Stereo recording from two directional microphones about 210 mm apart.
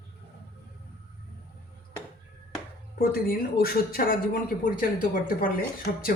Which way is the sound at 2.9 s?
45° left (ahead or behind).